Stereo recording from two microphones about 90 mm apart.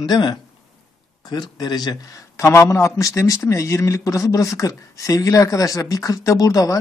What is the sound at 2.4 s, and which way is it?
Speech, 30° left (ahead or behind).